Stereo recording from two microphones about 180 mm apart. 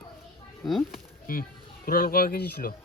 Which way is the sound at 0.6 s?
Centre (ahead or behind).